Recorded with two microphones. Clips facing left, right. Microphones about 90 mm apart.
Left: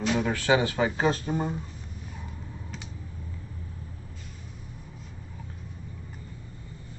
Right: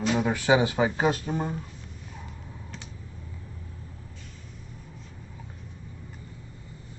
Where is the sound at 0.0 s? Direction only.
15° right (ahead or behind).